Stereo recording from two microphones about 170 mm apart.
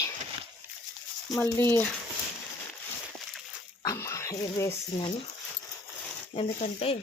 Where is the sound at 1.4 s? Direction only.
15° left (ahead or behind).